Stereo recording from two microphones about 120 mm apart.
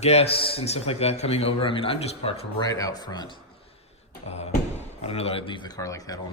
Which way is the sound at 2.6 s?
30° left (ahead or behind).